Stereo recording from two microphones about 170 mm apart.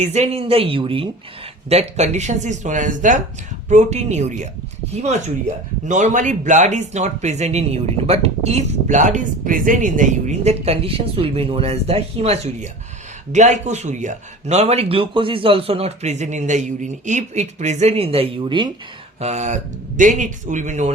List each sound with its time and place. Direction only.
0.0 s speech: 40° right (ahead or behind)
5.9 s speech: 45° right (ahead or behind); by 18.7 s 30° right (ahead or behind)
19.2 s speech: 40° right (ahead or behind)